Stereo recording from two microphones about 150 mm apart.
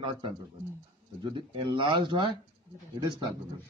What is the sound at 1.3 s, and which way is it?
A man's voice, 35° right (ahead or behind).